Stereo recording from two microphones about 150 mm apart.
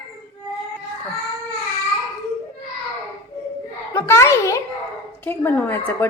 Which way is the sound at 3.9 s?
15° left (ahead or behind).